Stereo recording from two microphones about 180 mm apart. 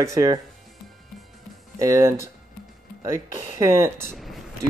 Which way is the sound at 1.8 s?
15° right (ahead or behind).